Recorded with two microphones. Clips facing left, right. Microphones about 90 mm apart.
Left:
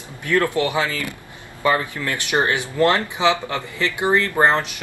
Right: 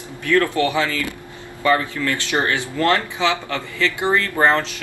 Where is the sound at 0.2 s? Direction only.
20° left (ahead or behind).